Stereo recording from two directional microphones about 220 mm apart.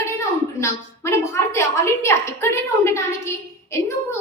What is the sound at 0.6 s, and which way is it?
A woman's voice, 10° left (ahead or behind).